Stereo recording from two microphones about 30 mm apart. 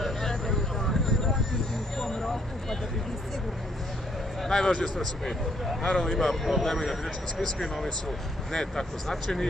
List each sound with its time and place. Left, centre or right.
0.0 s vehicle: centre
4.4 s speech: centre
6.1 s speech: centre